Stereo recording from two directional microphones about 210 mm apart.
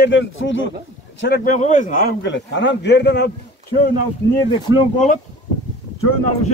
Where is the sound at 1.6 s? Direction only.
40° left (ahead or behind).